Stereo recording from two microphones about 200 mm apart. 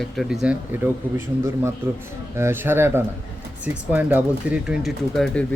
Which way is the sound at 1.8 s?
10° right (ahead or behind).